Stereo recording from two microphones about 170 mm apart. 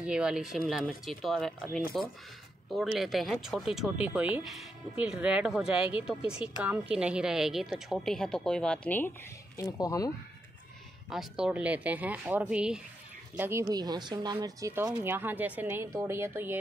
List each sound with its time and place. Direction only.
0.0 s a woman's voice: 5° right (ahead or behind); by 10.1 s 20° left (ahead or behind)
11.1 s speech: 5° right (ahead or behind)
13.4 s speech: 15° right (ahead or behind)